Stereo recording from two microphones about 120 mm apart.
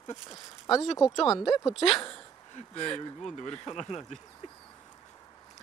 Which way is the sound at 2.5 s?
65° left (ahead or behind).